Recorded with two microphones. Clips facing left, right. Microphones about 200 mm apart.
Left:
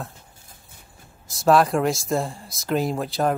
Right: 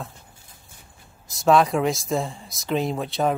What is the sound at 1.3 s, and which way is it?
Speech, centre (ahead or behind).